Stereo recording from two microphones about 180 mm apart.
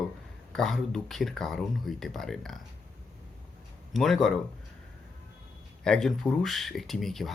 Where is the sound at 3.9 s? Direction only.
Centre (ahead or behind).